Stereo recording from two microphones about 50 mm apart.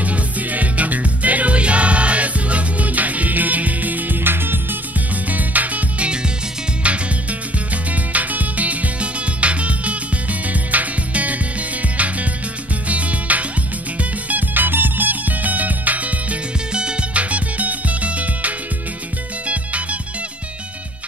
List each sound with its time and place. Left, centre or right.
0.0 s music: right
5.3 s music: right
7.7 s music: right
12.8 s music: right
14.3 s music: right